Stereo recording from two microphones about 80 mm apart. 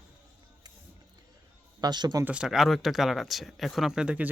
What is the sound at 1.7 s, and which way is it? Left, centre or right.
Speech, right.